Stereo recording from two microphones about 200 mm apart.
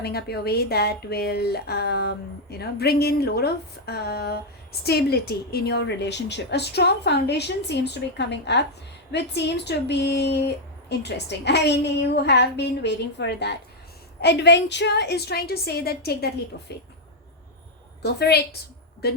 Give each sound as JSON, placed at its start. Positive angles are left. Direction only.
{"t": 0.0, "sound": "a woman's voice", "side_deg": 55}
{"t": 18.0, "sound": "a woman's voice", "side_deg": 55}